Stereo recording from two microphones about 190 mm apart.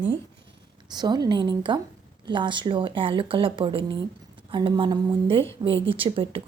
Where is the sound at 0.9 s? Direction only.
20° right (ahead or behind).